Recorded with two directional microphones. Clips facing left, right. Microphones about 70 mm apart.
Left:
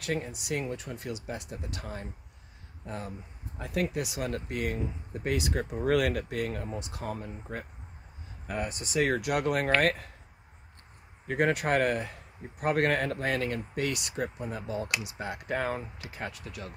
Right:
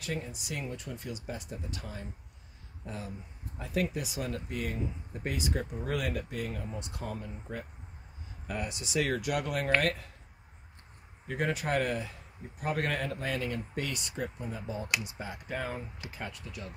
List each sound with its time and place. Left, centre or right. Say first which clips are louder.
0.0 s speech: left 4 dB; left
3.6 s speech: left 2 dB; left
5.3 s speech: left 4 dB; left
8.5 s speech: left 3 dB; left
9.2 s speech: left 4 dB; left
11.2 s speech: left 5 dB; left